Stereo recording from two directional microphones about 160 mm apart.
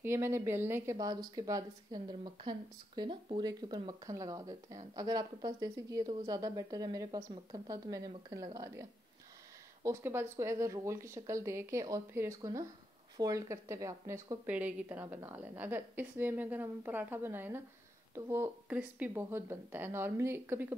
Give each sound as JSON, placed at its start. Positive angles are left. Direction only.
{"t": 0.0, "sound": "speech", "side_deg": -15}
{"t": 9.8, "sound": "speech", "side_deg": -15}